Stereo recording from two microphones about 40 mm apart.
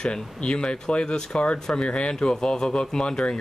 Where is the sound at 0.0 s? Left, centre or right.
Left.